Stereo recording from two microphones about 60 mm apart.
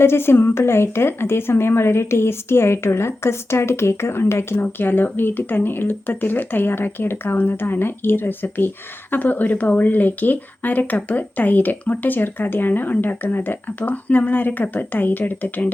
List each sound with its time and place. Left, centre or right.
0.0 s a woman's voice: left
4.6 s speech: left